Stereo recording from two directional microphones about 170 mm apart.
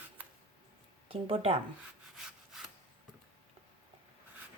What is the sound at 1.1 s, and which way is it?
Speech, 35° right (ahead or behind).